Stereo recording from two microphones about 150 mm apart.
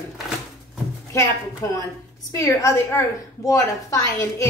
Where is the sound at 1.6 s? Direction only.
20° left (ahead or behind).